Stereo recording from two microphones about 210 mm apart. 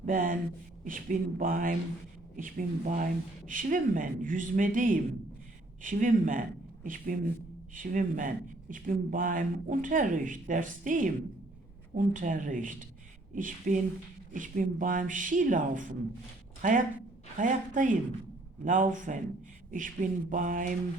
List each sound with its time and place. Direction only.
0.0 s a woman's voice: 40° right (ahead or behind)